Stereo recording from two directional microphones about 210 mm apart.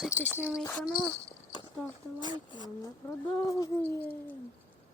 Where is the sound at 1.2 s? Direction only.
20° left (ahead or behind).